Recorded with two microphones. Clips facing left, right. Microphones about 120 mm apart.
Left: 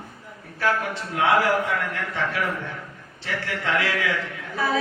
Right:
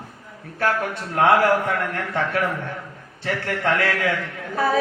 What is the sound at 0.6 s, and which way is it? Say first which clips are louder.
Speech: right 2 dB; 50° right (ahead or behind).